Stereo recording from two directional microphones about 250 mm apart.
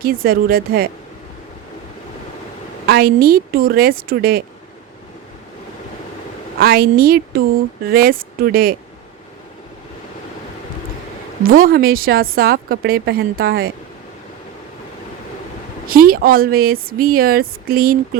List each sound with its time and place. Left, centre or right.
0.0 s a woman's voice: right
2.8 s a woman's voice: right
6.6 s a woman's voice: right
11.4 s a woman's voice: right
15.9 s a woman's voice: right